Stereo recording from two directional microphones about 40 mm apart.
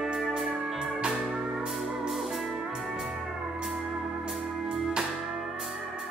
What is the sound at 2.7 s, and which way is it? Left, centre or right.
Music, centre.